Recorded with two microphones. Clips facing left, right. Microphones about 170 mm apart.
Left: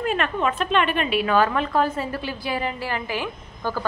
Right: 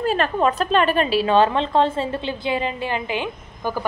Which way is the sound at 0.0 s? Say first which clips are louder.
Right 4 dB; 35° right (ahead or behind).